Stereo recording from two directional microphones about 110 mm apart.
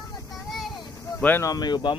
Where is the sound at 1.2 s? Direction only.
15° left (ahead or behind).